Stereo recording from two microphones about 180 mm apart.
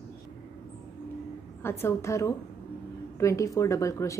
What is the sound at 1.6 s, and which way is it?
A woman's voice, 15° left (ahead or behind).